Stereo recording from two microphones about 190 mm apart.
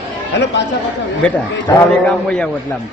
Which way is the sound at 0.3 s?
65° left (ahead or behind).